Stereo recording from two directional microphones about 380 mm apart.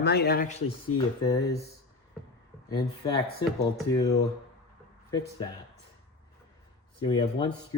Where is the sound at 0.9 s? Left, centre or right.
Centre.